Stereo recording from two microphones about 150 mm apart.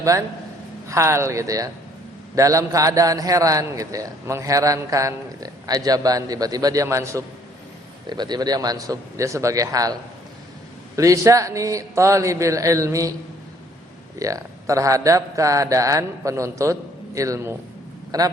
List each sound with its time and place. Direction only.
0.0 s a man's voice: 20° right (ahead or behind)
14.2 s a man's voice: 20° right (ahead or behind)